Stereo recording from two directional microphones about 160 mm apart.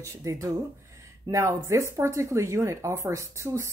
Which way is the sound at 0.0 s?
20° right (ahead or behind).